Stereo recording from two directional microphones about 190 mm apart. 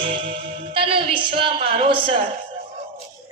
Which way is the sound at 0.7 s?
30° right (ahead or behind).